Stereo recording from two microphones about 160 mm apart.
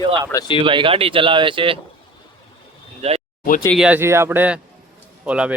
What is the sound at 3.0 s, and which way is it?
Speech, 40° right (ahead or behind).